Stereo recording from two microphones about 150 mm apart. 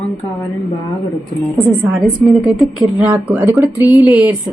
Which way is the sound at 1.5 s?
10° right (ahead or behind).